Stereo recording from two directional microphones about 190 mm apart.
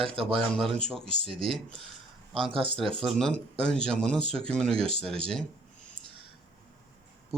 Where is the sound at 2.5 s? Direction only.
25° right (ahead or behind).